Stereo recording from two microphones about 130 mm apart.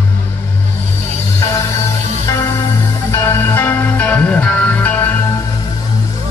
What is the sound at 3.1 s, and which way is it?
Music, 20° left (ahead or behind).